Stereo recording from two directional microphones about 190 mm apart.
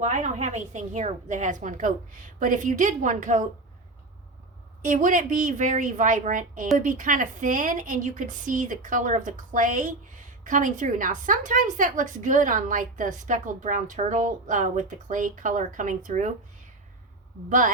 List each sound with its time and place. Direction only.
0.0 s a woman's voice: 35° right (ahead or behind)
4.8 s a woman's voice: 40° right (ahead or behind)